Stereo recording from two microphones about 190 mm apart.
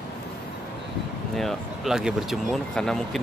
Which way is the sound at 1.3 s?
Centre (ahead or behind).